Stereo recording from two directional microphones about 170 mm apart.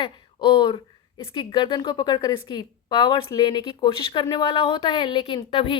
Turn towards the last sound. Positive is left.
turn(degrees=30)  # may be behind; listen again after turning